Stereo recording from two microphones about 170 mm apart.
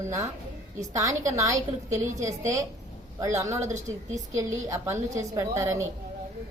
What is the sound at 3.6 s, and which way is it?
Speech, 45° right (ahead or behind).